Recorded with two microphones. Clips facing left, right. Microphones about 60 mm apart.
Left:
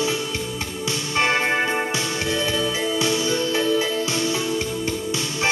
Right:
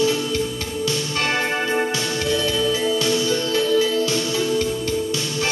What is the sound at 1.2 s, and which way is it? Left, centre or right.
Music, left.